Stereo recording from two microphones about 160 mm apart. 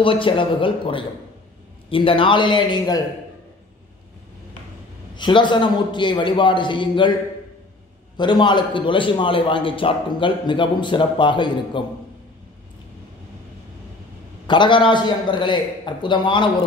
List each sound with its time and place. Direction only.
0.0 s a man's voice: 35° left (ahead or behind)
5.1 s a man's voice: 30° left (ahead or behind)
8.2 s a man's voice: 30° left (ahead or behind)
14.5 s a man's voice: 30° left (ahead or behind)